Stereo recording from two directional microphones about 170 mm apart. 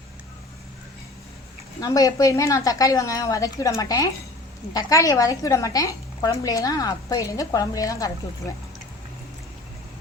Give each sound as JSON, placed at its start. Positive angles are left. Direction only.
{"t": 1.8, "sound": "a woman's voice", "side_deg": 20}